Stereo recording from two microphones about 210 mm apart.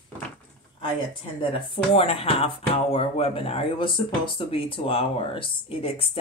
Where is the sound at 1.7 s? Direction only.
25° left (ahead or behind).